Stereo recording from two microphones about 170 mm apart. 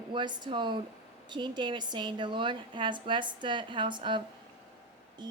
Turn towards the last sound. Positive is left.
turn(degrees=-25)  # may be behind; listen again after turning